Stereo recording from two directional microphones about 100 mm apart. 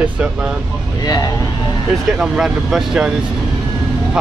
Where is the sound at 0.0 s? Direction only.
10° right (ahead or behind).